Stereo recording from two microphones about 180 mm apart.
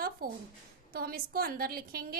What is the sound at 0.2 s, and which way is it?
A woman's voice, 55° right (ahead or behind).